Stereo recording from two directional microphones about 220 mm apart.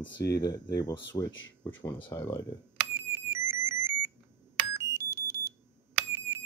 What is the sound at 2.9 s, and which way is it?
Music, 10° right (ahead or behind).